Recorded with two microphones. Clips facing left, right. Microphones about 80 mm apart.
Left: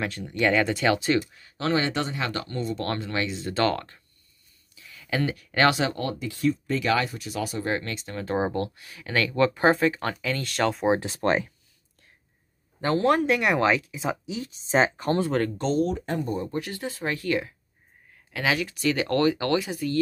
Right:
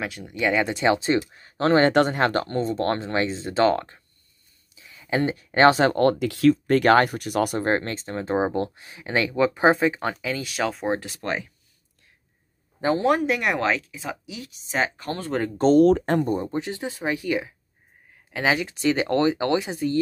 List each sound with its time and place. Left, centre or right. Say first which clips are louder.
0.0 s speech: left 1 dB; centre; by 1.2 s right
1.3 s speech: right 6 dB; right
4.7 s a sound: right 3 dB; right
5.8 s speech: right 8 dB; right
6.1 s speech: right 7 dB; right
6.8 s speech: right 7 dB; right; by 11.0 s centre
11.2 s speech: left 6 dB; left
12.8 s speech: right 1 dB; centre
13.9 s speech: left 4 dB; left
15.5 s speech: right 9 dB; right
15.8 s speech: right 9 dB; right
16.4 s speech: right 3 dB; right
18.1 s speech: right 3 dB; right